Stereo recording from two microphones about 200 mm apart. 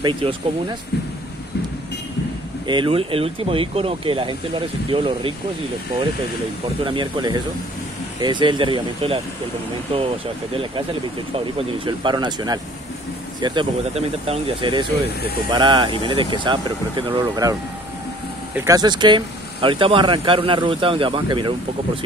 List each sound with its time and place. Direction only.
0.0 s speech: 25° right (ahead or behind)
2.6 s speech: 25° right (ahead or behind)
6.8 s speech: 25° right (ahead or behind)